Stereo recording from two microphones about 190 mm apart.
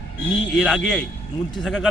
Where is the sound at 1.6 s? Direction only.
Centre (ahead or behind).